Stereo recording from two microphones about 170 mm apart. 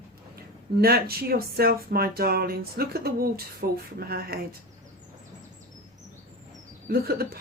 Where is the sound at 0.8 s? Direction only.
65° right (ahead or behind).